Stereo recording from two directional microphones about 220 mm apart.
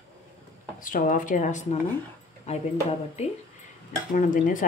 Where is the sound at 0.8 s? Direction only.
35° left (ahead or behind).